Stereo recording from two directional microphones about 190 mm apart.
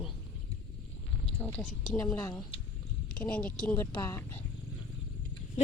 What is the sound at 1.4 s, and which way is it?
Speech, 10° left (ahead or behind).